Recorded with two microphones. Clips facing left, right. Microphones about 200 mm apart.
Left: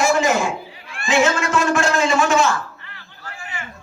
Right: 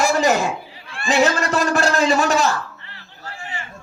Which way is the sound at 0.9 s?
35° right (ahead or behind).